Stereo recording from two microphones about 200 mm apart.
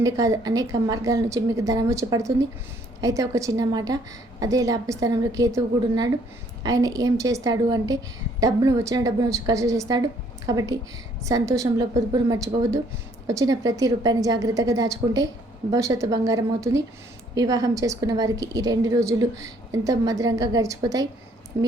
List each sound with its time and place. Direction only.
0.0 s a woman's voice: 15° right (ahead or behind)